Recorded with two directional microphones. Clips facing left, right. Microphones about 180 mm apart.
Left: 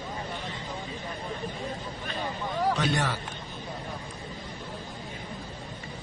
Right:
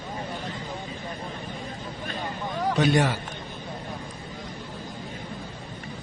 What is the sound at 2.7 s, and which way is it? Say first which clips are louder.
Speech: right 6 dB; 20° right (ahead or behind).